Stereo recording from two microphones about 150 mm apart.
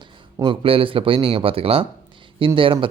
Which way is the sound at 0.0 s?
30° right (ahead or behind).